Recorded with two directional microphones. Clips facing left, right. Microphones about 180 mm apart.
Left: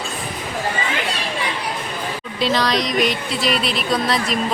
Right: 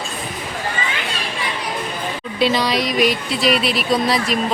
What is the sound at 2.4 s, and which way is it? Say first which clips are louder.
Speech: right 1 dB; 5° right (ahead or behind).